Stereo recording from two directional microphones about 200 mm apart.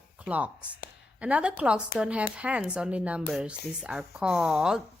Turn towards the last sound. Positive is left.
turn(degrees=-5)  # may be behind; listen again after turning